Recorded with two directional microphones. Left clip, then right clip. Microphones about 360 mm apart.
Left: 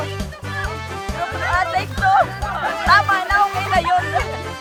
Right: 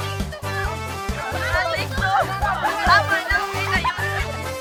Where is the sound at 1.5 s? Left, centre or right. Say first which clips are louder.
Left 3 dB; centre.